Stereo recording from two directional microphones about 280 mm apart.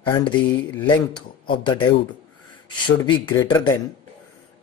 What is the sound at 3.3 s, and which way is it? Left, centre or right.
Speech, centre.